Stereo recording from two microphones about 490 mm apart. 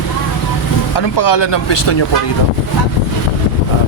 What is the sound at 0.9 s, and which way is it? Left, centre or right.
Speech, left.